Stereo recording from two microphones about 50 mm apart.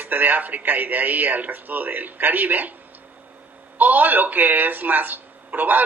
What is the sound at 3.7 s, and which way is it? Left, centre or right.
Speech, right.